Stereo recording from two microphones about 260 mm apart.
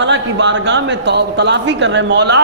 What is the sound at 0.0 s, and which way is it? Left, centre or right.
A man's voice, right.